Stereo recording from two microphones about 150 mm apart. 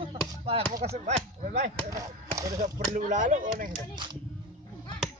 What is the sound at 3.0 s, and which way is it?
Speech, 60° right (ahead or behind).